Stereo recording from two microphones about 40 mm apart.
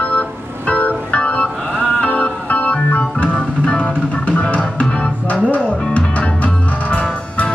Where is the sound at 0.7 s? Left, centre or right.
Left.